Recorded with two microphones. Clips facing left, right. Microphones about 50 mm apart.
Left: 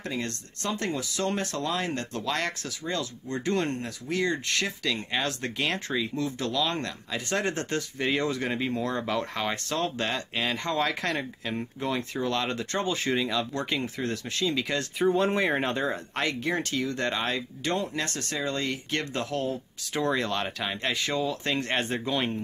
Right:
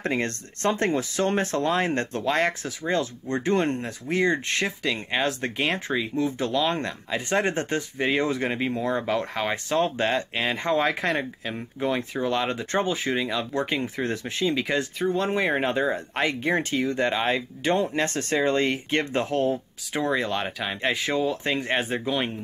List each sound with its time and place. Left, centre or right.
0.0 s speech: right; by 14.9 s centre
15.0 s speech: centre; by 19.6 s right
19.9 s speech: centre
21.5 s speech: centre